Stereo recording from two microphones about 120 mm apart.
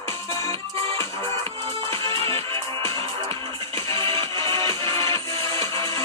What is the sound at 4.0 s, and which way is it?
Music, 45° right (ahead or behind).